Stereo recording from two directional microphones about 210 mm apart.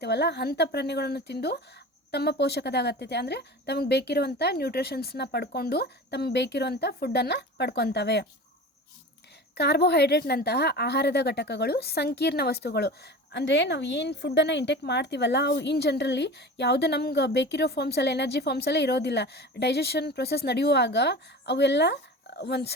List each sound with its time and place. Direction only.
0.0 s a woman's voice: 50° left (ahead or behind)
9.6 s a woman's voice: 50° left (ahead or behind)